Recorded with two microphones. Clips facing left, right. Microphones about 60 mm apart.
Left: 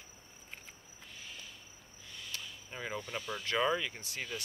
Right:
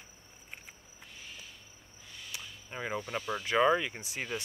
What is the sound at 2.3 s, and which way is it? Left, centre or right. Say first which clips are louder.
Speech: right 1 dB; centre.